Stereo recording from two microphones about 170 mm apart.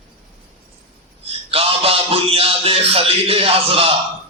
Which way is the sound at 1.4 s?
35° right (ahead or behind).